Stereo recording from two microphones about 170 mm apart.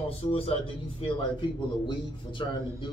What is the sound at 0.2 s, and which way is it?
A man's voice, 35° left (ahead or behind).